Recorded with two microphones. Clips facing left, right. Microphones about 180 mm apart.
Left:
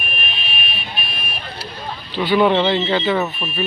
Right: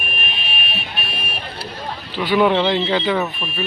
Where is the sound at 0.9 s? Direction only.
65° right (ahead or behind).